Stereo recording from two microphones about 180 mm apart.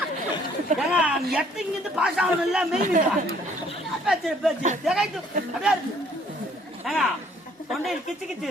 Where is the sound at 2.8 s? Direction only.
45° right (ahead or behind).